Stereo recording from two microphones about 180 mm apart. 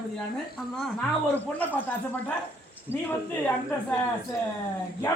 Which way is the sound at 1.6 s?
10° left (ahead or behind).